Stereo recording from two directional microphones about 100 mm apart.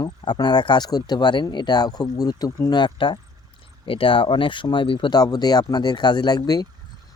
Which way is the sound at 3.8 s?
60° left (ahead or behind).